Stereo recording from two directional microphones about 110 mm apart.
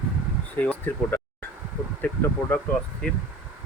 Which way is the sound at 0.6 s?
15° left (ahead or behind).